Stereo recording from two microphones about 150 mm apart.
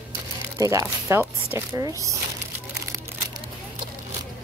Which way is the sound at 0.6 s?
20° right (ahead or behind).